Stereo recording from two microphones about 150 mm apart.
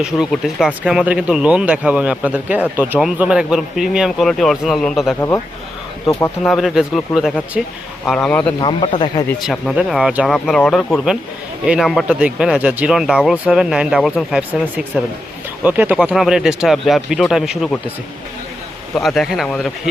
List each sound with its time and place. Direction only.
0.0 s speech: 5° right (ahead or behind)
6.1 s speech: 15° left (ahead or behind)
6.5 s speech: centre (ahead or behind)
8.5 s speech: 30° left (ahead or behind)
9.4 s speech: centre (ahead or behind)
18.9 s speech: centre (ahead or behind)